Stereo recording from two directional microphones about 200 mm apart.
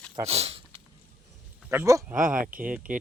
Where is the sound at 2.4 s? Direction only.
45° right (ahead or behind).